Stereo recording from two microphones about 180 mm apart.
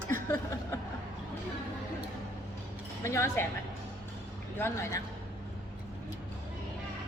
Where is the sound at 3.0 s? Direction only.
15° left (ahead or behind).